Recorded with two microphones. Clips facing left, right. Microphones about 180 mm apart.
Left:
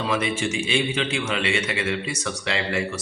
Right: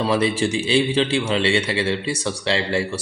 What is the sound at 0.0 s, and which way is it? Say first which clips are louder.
A man's voice: right 5 dB; 35° right (ahead or behind).